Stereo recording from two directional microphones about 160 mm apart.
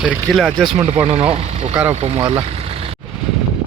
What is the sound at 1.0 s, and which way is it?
Speech, 35° right (ahead or behind).